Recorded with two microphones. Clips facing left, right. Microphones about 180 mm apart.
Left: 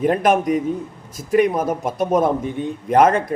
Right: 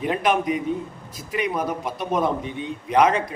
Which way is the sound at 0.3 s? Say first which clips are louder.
Left 4 dB; 45° left (ahead or behind).